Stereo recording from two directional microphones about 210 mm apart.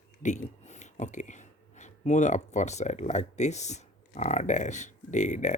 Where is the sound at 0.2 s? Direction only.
35° left (ahead or behind).